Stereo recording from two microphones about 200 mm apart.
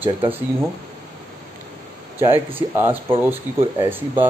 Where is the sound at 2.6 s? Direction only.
10° right (ahead or behind).